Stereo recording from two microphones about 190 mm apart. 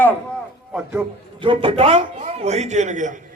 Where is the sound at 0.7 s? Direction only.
5° right (ahead or behind).